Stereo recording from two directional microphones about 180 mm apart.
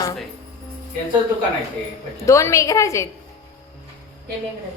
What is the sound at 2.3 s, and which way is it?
Speech, 15° left (ahead or behind).